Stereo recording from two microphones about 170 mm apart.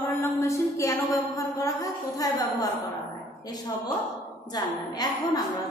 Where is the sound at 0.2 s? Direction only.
15° left (ahead or behind).